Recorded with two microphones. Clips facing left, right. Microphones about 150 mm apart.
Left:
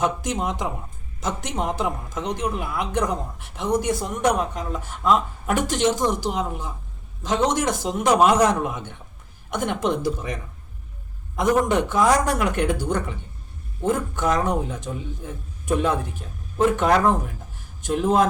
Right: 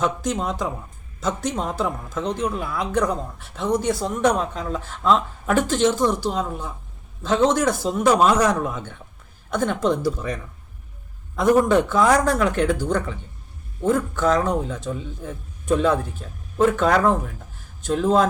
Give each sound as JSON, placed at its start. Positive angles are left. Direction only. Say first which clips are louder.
{"t": 0.0, "sound": "speech", "louder": "right 1 dB", "side_deg": 20}
{"t": 11.7, "sound": "speech", "louder": "right 2 dB", "side_deg": 20}